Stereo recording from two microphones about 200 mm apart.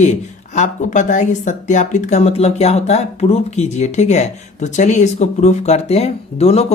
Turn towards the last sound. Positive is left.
turn(degrees=30)  # may be behind; listen again after turning